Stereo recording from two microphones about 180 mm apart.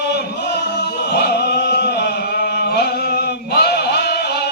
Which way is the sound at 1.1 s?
65° left (ahead or behind).